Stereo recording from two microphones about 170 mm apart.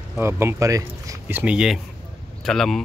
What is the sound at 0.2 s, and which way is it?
Speech, 15° right (ahead or behind).